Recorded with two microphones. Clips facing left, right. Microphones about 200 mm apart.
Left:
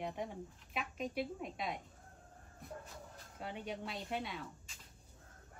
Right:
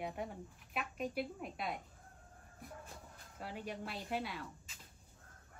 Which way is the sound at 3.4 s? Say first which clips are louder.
Left 1 dB; centre (ahead or behind).